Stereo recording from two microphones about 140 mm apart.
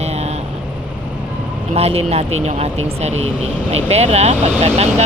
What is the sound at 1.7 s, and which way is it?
Speech, 45° right (ahead or behind).